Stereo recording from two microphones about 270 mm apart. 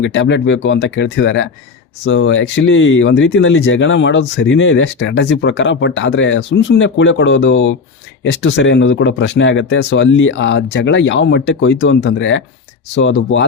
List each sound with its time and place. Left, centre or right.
0.0 s speech: left